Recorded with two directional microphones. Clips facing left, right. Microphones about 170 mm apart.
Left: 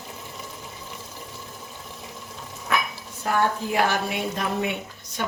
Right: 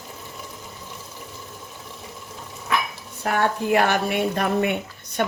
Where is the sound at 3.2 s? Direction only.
65° right (ahead or behind).